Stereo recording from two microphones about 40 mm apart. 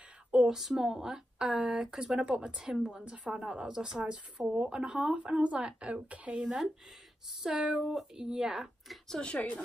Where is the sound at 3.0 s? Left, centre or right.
Right.